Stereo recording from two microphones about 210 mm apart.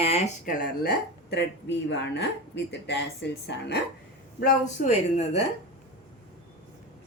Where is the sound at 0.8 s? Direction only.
50° left (ahead or behind).